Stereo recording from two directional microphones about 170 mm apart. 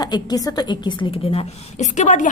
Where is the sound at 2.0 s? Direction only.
45° left (ahead or behind).